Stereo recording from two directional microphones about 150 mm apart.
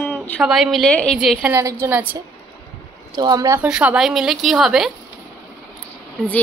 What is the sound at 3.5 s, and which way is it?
A woman's voice, 5° right (ahead or behind).